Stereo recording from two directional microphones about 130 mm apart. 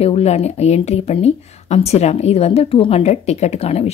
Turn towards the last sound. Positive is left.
turn(degrees=50)  # may be behind; listen again after turning